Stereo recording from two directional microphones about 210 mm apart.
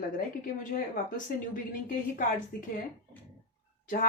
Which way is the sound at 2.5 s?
45° left (ahead or behind).